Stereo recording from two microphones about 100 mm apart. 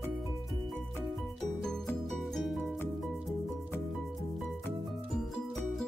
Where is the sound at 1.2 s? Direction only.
5° left (ahead or behind).